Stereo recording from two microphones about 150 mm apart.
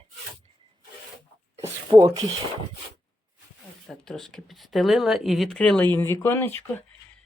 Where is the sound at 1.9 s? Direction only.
35° right (ahead or behind).